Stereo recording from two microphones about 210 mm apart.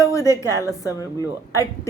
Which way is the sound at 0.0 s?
15° left (ahead or behind).